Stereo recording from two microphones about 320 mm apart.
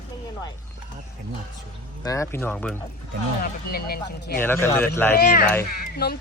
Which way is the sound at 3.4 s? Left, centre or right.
Left.